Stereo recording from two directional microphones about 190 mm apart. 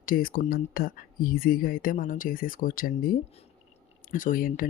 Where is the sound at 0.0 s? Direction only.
45° left (ahead or behind).